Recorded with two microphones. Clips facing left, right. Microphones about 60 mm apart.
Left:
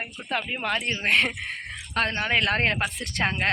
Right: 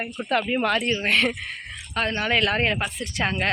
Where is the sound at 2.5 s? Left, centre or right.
Left.